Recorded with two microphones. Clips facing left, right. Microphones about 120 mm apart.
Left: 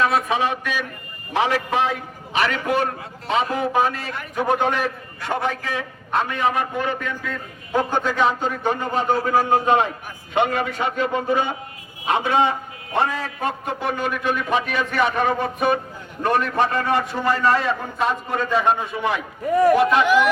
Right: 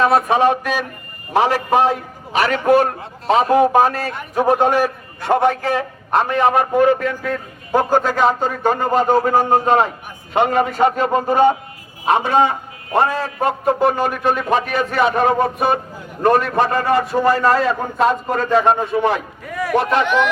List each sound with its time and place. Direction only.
0.0 s a man's voice: 45° right (ahead or behind)
19.5 s speech: 35° left (ahead or behind)
19.8 s a man's voice: 40° right (ahead or behind)
20.1 s speech: 5° left (ahead or behind)